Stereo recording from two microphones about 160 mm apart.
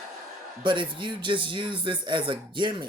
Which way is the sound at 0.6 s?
30° right (ahead or behind).